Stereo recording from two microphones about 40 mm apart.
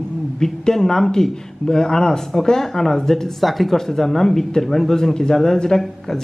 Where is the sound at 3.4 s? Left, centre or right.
Centre.